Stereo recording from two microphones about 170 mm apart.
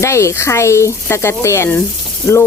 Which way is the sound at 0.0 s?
15° left (ahead or behind).